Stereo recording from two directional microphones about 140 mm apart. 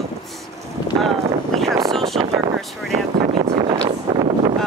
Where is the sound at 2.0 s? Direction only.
40° right (ahead or behind).